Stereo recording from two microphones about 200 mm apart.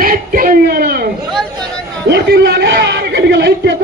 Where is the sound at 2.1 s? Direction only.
55° right (ahead or behind).